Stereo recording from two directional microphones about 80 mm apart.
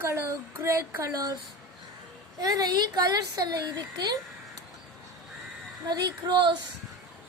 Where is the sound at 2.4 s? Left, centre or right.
Right.